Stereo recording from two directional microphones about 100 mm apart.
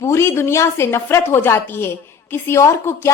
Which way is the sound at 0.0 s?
25° left (ahead or behind).